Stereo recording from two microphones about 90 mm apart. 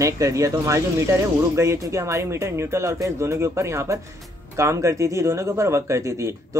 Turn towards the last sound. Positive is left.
turn(degrees=-35)  # may be behind; listen again after turning